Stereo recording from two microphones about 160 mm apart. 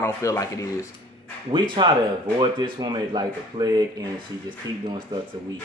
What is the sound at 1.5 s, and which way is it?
Speech, 30° right (ahead or behind).